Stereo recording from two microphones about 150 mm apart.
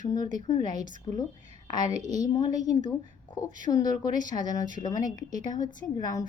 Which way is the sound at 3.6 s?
25° left (ahead or behind).